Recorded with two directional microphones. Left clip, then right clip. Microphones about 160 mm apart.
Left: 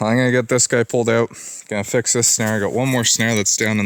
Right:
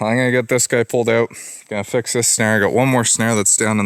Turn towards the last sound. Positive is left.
turn(degrees=-45)  # may be behind; listen again after turning